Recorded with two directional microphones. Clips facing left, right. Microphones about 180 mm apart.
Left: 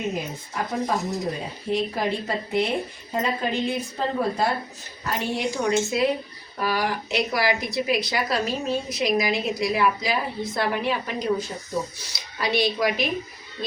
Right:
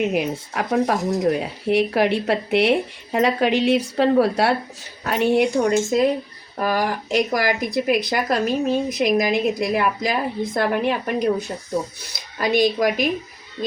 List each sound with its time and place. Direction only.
0.1 s speech: 75° right (ahead or behind)
5.0 s a woman's voice: 65° right (ahead or behind); by 13.1 s 45° right (ahead or behind)